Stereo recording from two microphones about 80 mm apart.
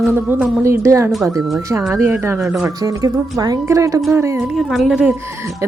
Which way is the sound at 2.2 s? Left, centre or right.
Right.